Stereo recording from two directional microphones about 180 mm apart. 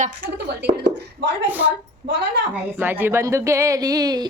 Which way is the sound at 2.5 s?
10° right (ahead or behind).